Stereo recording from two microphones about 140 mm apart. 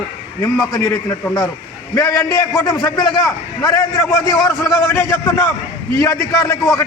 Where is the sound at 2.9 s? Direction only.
25° left (ahead or behind).